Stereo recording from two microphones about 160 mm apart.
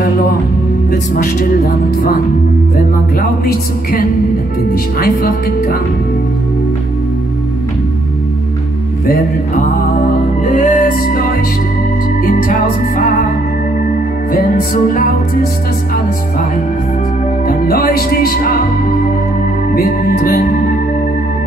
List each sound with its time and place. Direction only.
1.1 s speech: 65° left (ahead or behind)
3.2 s speech: 65° left (ahead or behind)
10.4 s music: 50° left (ahead or behind)
12.3 s music: 60° left (ahead or behind)
14.3 s speech: 60° left (ahead or behind)
17.5 s music: 65° left (ahead or behind)
19.7 s speech: 70° left (ahead or behind)